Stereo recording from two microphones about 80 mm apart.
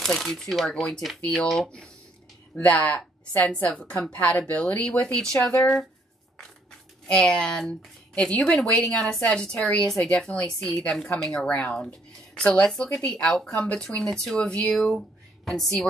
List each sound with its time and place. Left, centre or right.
0.0 s speech: centre
2.5 s speech: centre
7.1 s speech: centre